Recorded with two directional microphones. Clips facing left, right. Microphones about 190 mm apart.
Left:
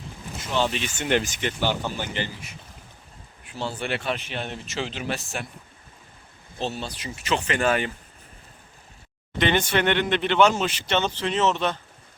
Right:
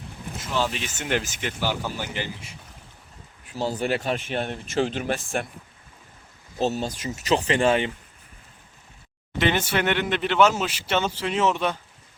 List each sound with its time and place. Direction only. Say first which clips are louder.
0.3 s speech: left 1 dB; centre (ahead or behind)
3.4 s speech: right 4 dB; 40° right (ahead or behind)
6.6 s speech: right 5 dB; 40° right (ahead or behind); by 7.9 s 25° right (ahead or behind)
9.4 s speech: left 1 dB; 5° right (ahead or behind)